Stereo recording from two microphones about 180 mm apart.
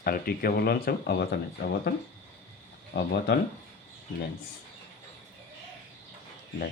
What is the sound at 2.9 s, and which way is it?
Speech, 60° left (ahead or behind).